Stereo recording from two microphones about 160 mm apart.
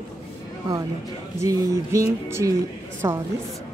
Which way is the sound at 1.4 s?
20° right (ahead or behind).